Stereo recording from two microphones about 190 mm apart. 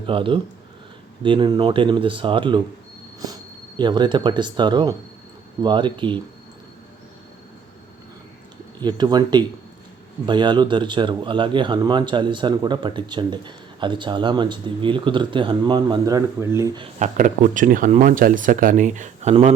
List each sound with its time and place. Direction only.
0.1 s speech: 25° right (ahead or behind)
3.8 s speech: 25° right (ahead or behind)
8.8 s speech: 20° right (ahead or behind)
16.8 s speech: 40° right (ahead or behind)